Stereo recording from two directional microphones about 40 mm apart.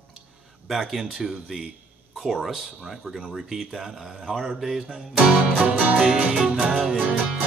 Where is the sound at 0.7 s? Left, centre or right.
Centre.